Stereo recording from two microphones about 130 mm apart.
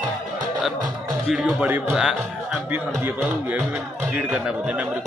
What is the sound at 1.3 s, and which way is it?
Speech, 5° right (ahead or behind).